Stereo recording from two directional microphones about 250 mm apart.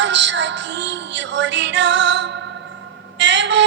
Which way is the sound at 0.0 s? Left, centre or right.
Right.